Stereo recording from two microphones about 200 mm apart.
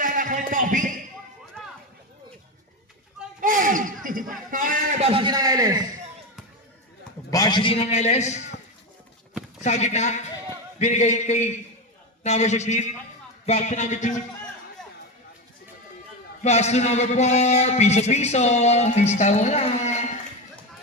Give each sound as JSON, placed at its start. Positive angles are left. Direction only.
{"t": 0.0, "sound": "a sound", "side_deg": -40}
{"t": 1.6, "sound": "run", "side_deg": 5}
{"t": 3.4, "sound": "a sound", "side_deg": -40}
{"t": 4.5, "sound": "a man's voice", "side_deg": -40}
{"t": 7.3, "sound": "a man's voice", "side_deg": 20}
{"t": 9.6, "sound": "a man's voice", "side_deg": 35}
{"t": 16.4, "sound": "a man's voice", "side_deg": 35}